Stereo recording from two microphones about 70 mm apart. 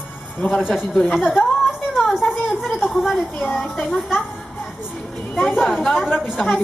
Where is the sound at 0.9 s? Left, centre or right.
Centre.